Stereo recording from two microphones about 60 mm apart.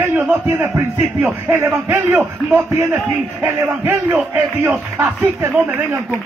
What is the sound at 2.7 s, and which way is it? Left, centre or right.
A man's voice, right.